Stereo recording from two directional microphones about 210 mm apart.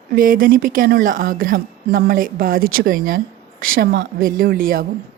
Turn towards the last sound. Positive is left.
turn(degrees=-40)  # may be behind; listen again after turning